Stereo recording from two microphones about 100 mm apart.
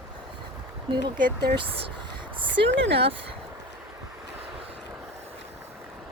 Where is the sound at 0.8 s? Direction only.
50° right (ahead or behind).